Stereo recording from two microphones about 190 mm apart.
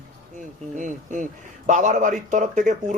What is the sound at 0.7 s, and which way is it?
Speech, 40° right (ahead or behind).